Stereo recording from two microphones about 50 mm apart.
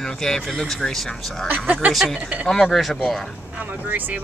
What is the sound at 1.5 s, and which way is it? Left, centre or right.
Speech, right.